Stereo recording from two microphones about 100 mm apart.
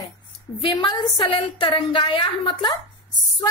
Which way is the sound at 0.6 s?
55° left (ahead or behind).